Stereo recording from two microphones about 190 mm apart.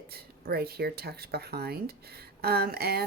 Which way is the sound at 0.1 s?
55° right (ahead or behind).